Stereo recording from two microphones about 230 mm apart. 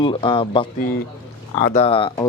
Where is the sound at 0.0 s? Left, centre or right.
Left.